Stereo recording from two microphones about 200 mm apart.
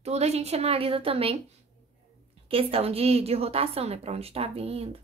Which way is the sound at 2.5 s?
30° right (ahead or behind).